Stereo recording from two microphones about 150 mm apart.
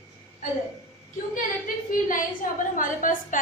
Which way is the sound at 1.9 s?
65° left (ahead or behind).